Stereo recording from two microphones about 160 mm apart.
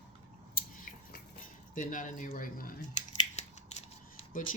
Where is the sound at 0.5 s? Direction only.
65° left (ahead or behind).